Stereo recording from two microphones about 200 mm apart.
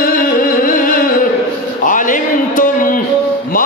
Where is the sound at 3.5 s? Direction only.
45° left (ahead or behind).